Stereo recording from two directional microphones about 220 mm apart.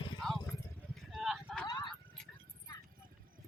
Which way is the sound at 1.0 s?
Centre (ahead or behind).